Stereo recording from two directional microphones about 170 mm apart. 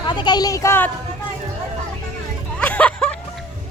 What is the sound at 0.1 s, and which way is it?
Speech, 25° left (ahead or behind).